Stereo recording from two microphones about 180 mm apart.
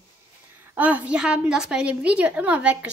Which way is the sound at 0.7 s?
10° right (ahead or behind).